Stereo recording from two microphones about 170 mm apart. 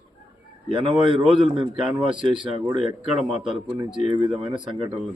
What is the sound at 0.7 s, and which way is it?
Speech, 30° right (ahead or behind).